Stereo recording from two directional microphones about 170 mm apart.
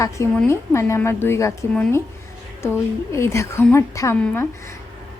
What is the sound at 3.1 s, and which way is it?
A woman's voice, 15° left (ahead or behind).